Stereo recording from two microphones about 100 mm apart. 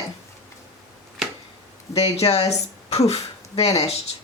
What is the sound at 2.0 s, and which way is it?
Speech, 90° left.